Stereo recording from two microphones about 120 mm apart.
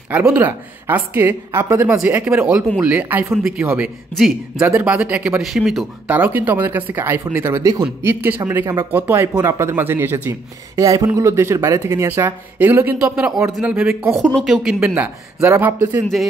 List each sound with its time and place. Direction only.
0.1 s speech: 15° right (ahead or behind)
6.0 s speech: 15° right (ahead or behind)
10.8 s speech: 30° right (ahead or behind)
14.3 s speech: 5° right (ahead or behind)